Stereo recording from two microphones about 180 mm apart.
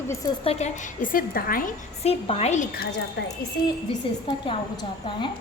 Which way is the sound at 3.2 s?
75° left (ahead or behind).